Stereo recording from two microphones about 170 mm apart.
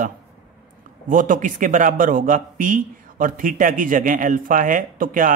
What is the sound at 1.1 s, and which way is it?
Speech, 50° right (ahead or behind).